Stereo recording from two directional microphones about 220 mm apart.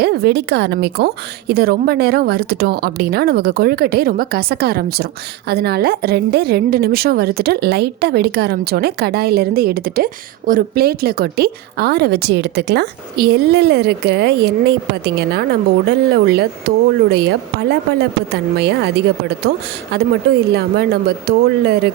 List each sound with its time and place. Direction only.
0.0 s a woman's voice: 45° right (ahead or behind)